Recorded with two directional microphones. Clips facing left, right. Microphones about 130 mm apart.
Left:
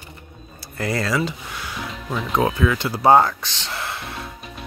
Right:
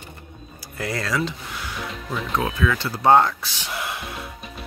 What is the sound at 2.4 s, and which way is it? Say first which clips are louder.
Speech: left 5 dB; 25° left (ahead or behind).